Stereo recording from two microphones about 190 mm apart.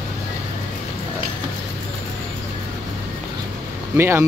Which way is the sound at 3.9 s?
15° right (ahead or behind).